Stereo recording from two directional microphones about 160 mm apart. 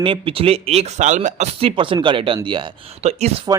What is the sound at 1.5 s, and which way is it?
A man's voice, 35° right (ahead or behind).